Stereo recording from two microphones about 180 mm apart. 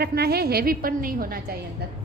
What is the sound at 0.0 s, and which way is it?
A woman's voice, 60° right (ahead or behind).